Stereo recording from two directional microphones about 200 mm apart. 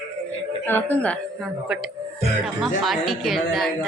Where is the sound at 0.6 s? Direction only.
10° left (ahead or behind).